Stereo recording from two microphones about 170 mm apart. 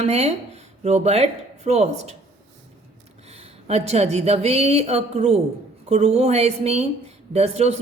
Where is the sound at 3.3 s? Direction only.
40° right (ahead or behind).